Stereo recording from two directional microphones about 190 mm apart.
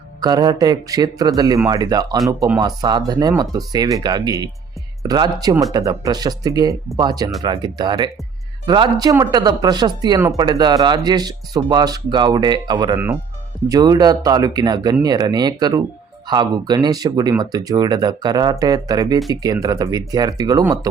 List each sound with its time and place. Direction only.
0.2 s speech: 20° right (ahead or behind)